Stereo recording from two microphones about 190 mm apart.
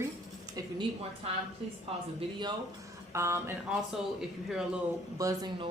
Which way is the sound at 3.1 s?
15° right (ahead or behind).